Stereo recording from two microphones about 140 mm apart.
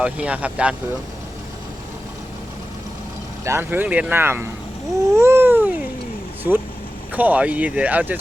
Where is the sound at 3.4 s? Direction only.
20° right (ahead or behind).